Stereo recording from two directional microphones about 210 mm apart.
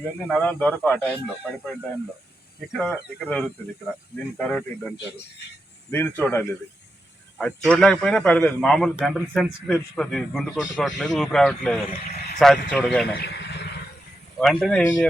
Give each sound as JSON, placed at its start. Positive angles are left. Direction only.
{"t": 0.3, "sound": "speech", "side_deg": 5}
{"t": 2.7, "sound": "a man's voice", "side_deg": 5}
{"t": 5.9, "sound": "a man's voice", "side_deg": 10}
{"t": 11.9, "sound": "speech", "side_deg": 40}
{"t": 12.4, "sound": "a man's voice", "side_deg": 0}
{"t": 13.1, "sound": "vehicle", "side_deg": 55}
{"t": 14.3, "sound": "a man's voice", "side_deg": 5}